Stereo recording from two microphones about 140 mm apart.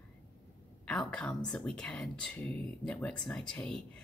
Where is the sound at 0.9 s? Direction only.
5° left (ahead or behind).